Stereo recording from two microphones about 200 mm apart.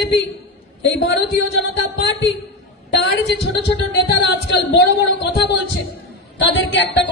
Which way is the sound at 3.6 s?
60° left (ahead or behind).